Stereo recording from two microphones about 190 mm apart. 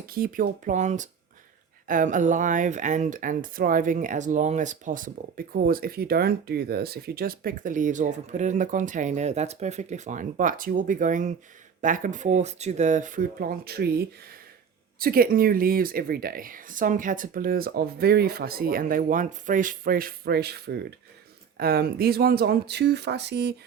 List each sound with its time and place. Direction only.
0.0 s speech: 50° right (ahead or behind)